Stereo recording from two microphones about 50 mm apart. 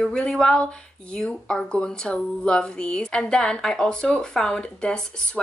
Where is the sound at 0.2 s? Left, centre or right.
Centre.